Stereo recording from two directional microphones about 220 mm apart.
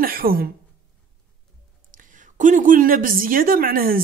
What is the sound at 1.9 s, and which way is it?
A woman's voice, 35° right (ahead or behind).